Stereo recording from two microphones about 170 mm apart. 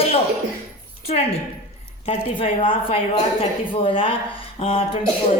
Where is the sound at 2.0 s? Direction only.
30° left (ahead or behind).